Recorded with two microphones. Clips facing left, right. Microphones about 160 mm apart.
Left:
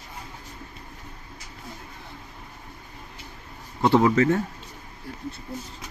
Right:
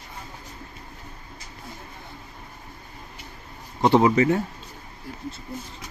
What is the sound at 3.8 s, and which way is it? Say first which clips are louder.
Speech: right 1 dB; 20° right (ahead or behind).